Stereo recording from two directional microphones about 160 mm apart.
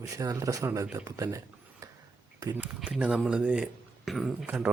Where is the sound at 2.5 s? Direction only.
10° right (ahead or behind).